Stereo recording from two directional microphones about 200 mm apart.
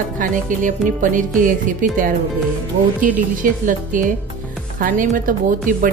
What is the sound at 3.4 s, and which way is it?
A woman's voice, 40° right (ahead or behind).